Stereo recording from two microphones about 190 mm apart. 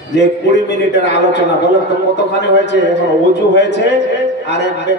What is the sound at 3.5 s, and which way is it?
Speech, 65° left (ahead or behind).